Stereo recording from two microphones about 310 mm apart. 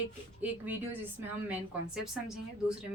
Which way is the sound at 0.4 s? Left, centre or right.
Centre.